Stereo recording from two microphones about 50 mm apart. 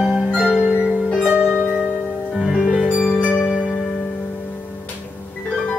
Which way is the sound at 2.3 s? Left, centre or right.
Centre.